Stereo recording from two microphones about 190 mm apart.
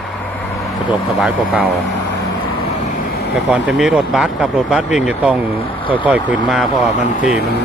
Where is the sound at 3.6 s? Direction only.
5° right (ahead or behind).